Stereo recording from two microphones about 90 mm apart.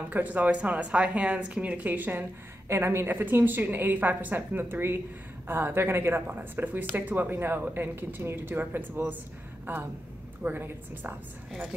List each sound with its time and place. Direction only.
0.1 s speech: 20° right (ahead or behind)